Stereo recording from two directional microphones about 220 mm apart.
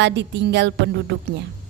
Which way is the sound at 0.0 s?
55° right (ahead or behind).